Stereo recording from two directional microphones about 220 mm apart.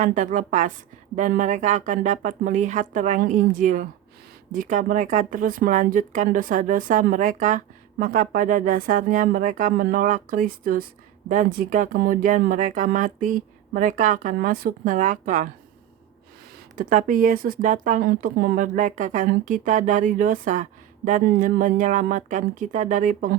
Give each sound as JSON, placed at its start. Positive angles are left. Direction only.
{"t": 0.0, "sound": "speech", "side_deg": -35}
{"t": 16.7, "sound": "speech", "side_deg": -35}